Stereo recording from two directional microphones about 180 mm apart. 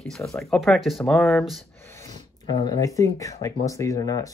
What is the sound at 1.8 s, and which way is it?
Speech, 20° left (ahead or behind).